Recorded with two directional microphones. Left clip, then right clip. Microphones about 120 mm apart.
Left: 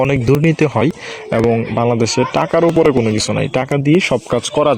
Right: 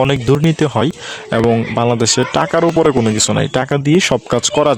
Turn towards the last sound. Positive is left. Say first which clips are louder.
# right 1 dB
turn(degrees=-25)  # may be behind; listen again after turning